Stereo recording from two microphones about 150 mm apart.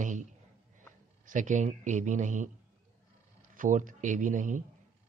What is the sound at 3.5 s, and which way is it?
A man's voice, 60° right (ahead or behind).